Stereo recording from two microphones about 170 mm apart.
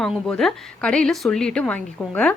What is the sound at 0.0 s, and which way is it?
A woman's voice, 5° left (ahead or behind).